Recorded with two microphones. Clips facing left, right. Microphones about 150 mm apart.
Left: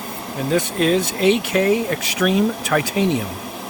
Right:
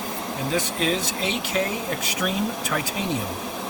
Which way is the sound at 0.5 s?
55° left (ahead or behind).